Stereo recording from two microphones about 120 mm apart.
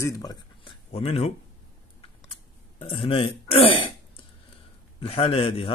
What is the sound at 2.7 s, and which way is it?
Speech, 50° left (ahead or behind).